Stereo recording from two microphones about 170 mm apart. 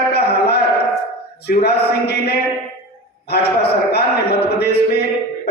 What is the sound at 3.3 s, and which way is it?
A man's voice, 75° left (ahead or behind).